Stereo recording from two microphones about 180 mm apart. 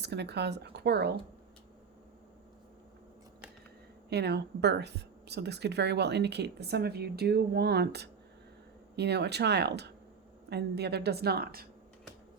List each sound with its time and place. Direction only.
0.0 s speech: 70° right (ahead or behind)
4.1 s a woman's voice: 65° right (ahead or behind)